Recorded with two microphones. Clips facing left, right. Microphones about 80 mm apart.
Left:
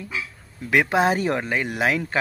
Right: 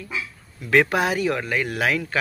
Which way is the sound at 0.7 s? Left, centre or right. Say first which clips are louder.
Even; centre.